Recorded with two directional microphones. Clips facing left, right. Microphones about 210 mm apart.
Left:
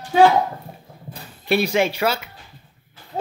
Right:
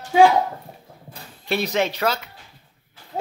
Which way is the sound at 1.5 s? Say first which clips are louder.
Left 3 dB; 10° left (ahead or behind).